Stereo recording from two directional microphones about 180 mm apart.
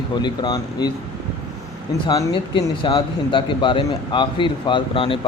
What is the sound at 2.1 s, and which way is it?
Speech, 25° left (ahead or behind).